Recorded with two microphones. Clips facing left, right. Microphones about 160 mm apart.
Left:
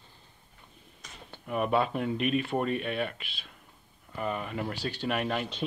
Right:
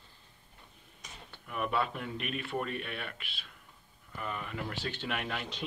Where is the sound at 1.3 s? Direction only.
40° left (ahead or behind).